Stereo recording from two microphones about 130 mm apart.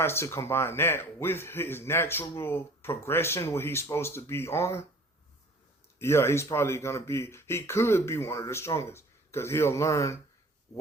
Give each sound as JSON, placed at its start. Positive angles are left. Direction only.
{"t": 0.0, "sound": "speech", "side_deg": 20}
{"t": 6.0, "sound": "speech", "side_deg": 20}